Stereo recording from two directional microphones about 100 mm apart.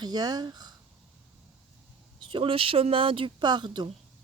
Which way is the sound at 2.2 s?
55° right (ahead or behind).